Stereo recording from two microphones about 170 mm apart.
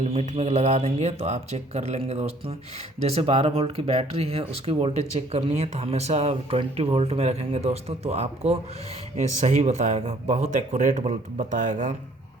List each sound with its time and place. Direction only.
0.1 s speech: 40° right (ahead or behind)